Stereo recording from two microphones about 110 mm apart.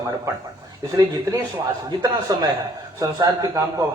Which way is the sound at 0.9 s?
30° right (ahead or behind).